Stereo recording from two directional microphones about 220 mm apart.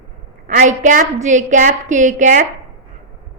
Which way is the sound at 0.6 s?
35° right (ahead or behind).